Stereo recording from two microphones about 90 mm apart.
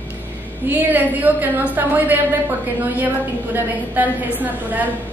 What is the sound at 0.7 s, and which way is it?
A woman's voice, 20° right (ahead or behind).